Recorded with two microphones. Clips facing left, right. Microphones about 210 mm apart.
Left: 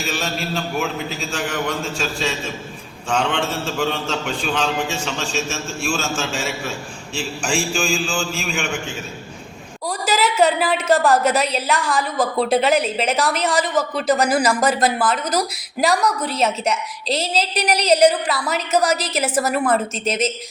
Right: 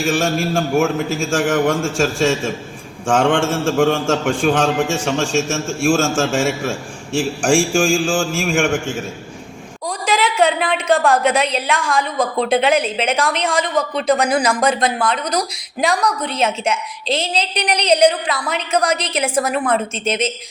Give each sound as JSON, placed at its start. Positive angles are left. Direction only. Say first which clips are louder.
{"t": 0.0, "sound": "a man's voice", "louder": "right 8 dB", "side_deg": -50}
{"t": 10.1, "sound": "a woman's voice", "louder": "right 1 dB", "side_deg": 5}